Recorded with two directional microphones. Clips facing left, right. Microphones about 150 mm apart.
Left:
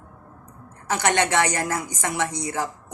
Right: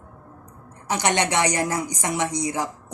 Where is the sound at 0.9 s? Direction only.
15° right (ahead or behind).